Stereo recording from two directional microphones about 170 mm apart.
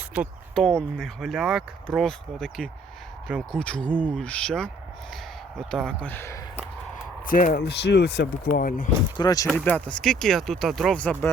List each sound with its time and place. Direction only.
0.1 s speech: centre (ahead or behind); by 6.4 s 15° left (ahead or behind)
7.3 s speech: 55° left (ahead or behind)
9.1 s speech: 20° left (ahead or behind)
9.5 s speech: 5° left (ahead or behind)